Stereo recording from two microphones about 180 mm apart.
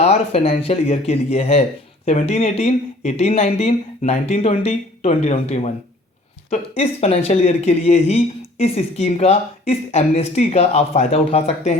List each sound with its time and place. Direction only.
0.0 s speech: 35° left (ahead or behind)